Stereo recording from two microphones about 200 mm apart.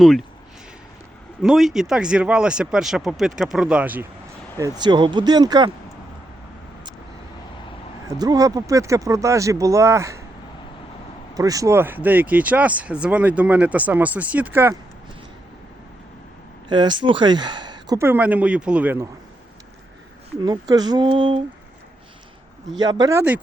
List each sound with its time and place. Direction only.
0.0 s speech: centre (ahead or behind)
1.4 s speech: centre (ahead or behind)
4.8 s speech: 20° right (ahead or behind)
8.2 s speech: 20° right (ahead or behind)
11.3 s speech: 15° right (ahead or behind)
16.6 s speech: 20° right (ahead or behind)
20.4 s speech: 20° right (ahead or behind)
22.8 s speech: 20° right (ahead or behind)